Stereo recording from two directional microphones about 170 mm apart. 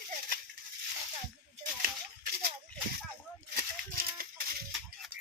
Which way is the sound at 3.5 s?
60° right (ahead or behind).